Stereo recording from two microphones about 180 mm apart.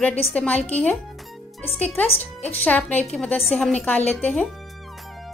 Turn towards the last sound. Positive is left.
turn(degrees=10)  # may be behind; listen again after turning